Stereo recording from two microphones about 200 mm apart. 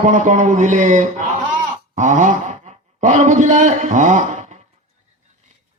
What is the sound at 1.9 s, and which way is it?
Wail, 40° right (ahead or behind).